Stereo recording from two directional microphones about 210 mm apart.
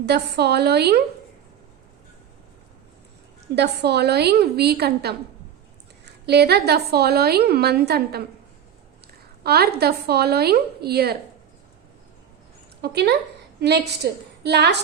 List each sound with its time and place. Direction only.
0.0 s a woman's voice: 50° right (ahead or behind)
3.5 s a woman's voice: 50° right (ahead or behind)
9.4 s a woman's voice: 50° right (ahead or behind)
12.8 s a woman's voice: 55° right (ahead or behind)